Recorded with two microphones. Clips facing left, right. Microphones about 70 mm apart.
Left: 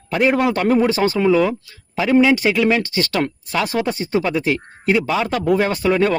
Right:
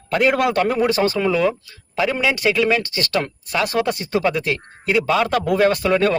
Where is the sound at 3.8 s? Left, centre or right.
Left.